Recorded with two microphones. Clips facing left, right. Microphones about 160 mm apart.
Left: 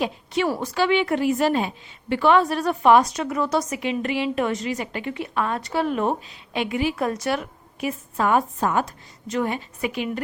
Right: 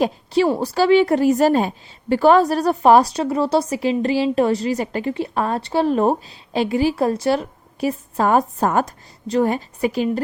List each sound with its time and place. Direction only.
0.0 s a woman's voice: 30° right (ahead or behind)